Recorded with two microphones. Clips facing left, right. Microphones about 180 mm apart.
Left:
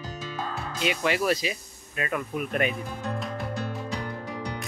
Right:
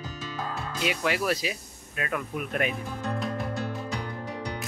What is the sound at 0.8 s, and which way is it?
Speech, centre (ahead or behind).